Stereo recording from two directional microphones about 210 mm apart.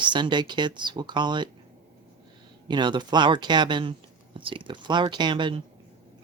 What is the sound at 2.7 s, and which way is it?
Speech, 20° right (ahead or behind).